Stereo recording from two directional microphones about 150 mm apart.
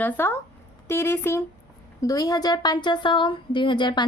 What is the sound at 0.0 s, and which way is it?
A woman's voice, 15° left (ahead or behind).